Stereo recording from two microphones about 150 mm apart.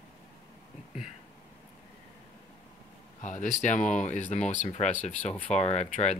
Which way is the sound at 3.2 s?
55° left (ahead or behind).